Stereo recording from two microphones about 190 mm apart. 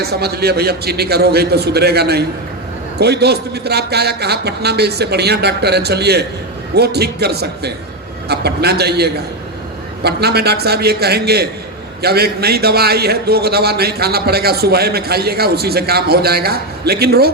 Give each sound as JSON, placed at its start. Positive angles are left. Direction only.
{"t": 0.0, "sound": "a man's voice", "side_deg": -55}